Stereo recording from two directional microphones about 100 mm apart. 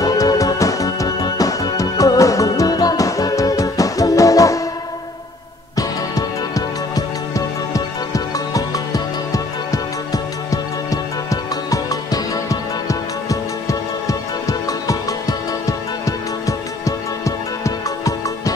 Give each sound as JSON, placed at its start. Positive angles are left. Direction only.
{"t": 0.0, "sound": "music", "side_deg": 40}
{"t": 5.8, "sound": "music", "side_deg": 35}